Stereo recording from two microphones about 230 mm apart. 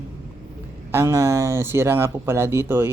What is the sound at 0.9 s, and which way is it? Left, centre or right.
Speech, centre.